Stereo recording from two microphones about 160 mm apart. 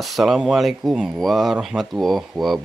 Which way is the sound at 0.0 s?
Centre (ahead or behind).